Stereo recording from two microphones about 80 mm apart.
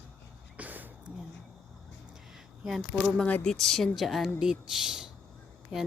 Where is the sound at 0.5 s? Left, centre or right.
Right.